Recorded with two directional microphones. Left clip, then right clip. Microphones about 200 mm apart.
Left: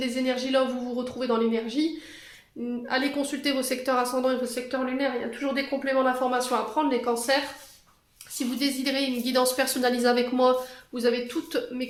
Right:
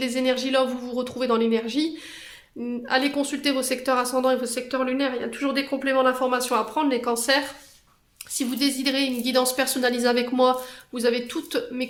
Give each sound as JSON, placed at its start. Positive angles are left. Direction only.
{"t": 0.0, "sound": "speech", "side_deg": -35}
{"t": 2.8, "sound": "speech", "side_deg": -30}
{"t": 8.4, "sound": "speech", "side_deg": -30}